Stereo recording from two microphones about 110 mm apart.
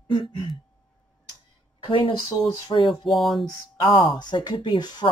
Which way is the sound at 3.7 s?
50° left (ahead or behind).